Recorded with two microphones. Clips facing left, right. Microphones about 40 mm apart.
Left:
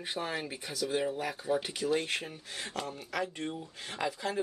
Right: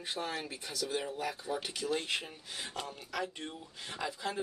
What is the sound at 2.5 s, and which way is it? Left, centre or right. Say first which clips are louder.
Speech: left 3 dB; left.